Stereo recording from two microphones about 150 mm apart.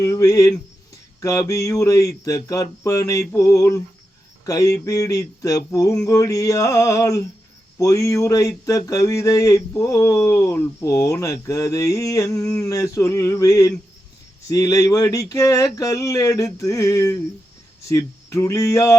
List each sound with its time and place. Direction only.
0.0 s speech: 20° left (ahead or behind)